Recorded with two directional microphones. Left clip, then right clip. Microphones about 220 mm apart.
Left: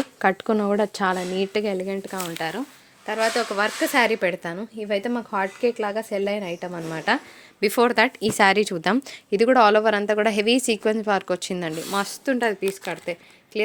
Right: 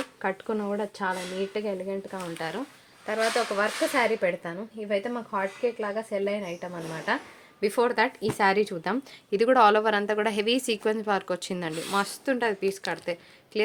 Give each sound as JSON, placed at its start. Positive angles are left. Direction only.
{"t": 0.2, "sound": "speech", "side_deg": 50}
{"t": 2.4, "sound": "speech", "side_deg": 35}
{"t": 7.6, "sound": "speech", "side_deg": 40}
{"t": 9.3, "sound": "a woman's voice", "side_deg": 25}